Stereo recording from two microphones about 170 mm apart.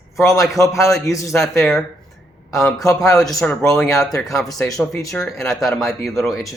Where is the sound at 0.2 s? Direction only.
15° left (ahead or behind).